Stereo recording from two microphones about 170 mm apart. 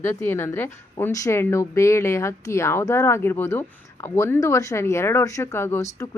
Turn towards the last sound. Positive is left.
turn(degrees=20)  # may be behind; listen again after turning